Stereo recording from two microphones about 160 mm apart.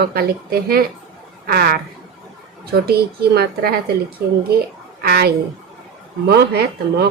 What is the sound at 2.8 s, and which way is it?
Speech, 75° right (ahead or behind).